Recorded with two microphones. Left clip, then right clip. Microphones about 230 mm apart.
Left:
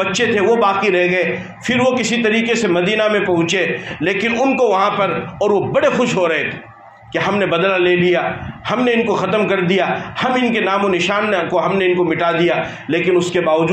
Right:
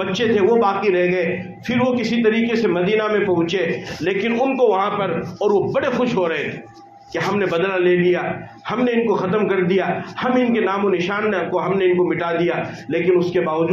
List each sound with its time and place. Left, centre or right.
0.1 s a man's voice: left